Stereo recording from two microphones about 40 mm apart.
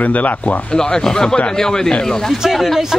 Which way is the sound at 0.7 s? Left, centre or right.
Centre.